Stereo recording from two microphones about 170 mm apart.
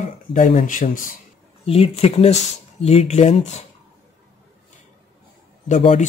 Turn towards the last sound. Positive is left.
turn(degrees=40)  # may be behind; listen again after turning